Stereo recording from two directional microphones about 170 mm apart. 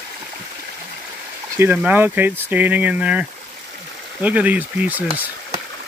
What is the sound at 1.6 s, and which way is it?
Speech, 10° right (ahead or behind).